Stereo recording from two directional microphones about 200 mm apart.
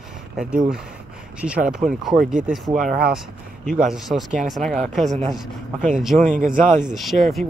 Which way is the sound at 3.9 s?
Centre (ahead or behind).